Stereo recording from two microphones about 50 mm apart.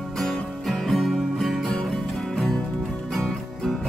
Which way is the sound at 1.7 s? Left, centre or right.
Centre.